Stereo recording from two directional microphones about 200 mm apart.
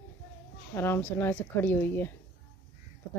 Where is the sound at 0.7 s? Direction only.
10° left (ahead or behind).